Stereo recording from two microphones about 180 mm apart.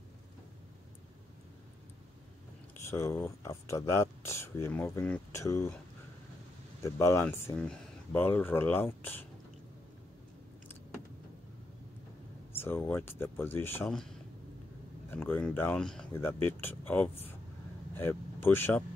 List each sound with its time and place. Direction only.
2.7 s speech: 15° left (ahead or behind)
6.8 s speech: 15° left (ahead or behind)
12.5 s speech: 15° left (ahead or behind)
15.0 s speech: 10° left (ahead or behind)